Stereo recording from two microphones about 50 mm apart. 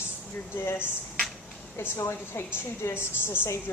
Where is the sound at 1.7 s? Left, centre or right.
Left.